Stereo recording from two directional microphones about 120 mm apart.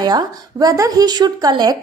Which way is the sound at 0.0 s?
35° right (ahead or behind).